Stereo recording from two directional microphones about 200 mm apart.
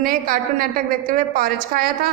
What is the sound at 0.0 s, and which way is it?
A woman's voice, 45° right (ahead or behind).